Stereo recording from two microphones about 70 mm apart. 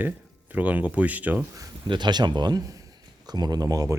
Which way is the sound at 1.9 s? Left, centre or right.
Right.